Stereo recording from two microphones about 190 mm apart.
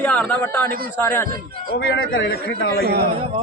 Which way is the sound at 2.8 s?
55° right (ahead or behind).